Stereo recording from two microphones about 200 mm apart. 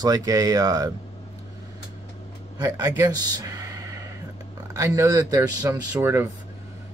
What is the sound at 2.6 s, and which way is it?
Speech, 15° right (ahead or behind).